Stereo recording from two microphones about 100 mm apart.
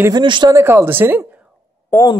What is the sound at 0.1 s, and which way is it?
Speech, 50° right (ahead or behind).